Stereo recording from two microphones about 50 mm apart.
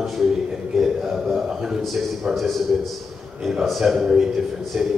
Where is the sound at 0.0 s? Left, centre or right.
Centre.